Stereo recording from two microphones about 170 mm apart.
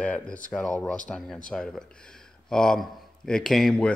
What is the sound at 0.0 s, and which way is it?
Speech, 5° left (ahead or behind).